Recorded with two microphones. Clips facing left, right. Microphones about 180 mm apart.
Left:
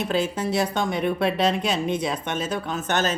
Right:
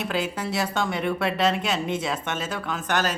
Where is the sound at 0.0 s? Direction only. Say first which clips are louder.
Left 3 dB; 20° left (ahead or behind).